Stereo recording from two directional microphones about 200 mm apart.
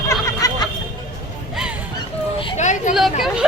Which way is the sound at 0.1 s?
15° left (ahead or behind).